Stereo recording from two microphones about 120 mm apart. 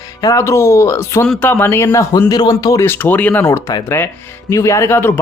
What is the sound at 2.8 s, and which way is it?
Speech, 15° left (ahead or behind).